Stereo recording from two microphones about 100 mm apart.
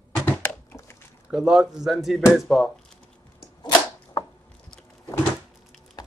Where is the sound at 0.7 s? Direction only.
5° right (ahead or behind).